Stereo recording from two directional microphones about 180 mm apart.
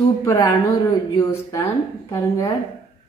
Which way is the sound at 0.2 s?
20° left (ahead or behind).